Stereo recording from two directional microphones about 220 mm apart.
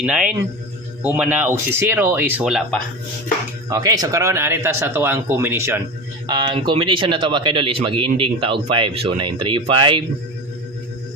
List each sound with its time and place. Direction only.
0.0 s speech: 5° right (ahead or behind)
3.7 s speech: 15° right (ahead or behind)